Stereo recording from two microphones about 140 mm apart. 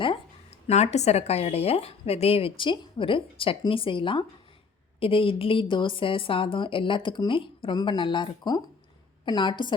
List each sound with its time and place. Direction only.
0.7 s a woman's voice: 50° left (ahead or behind); by 9.7 s 35° left (ahead or behind)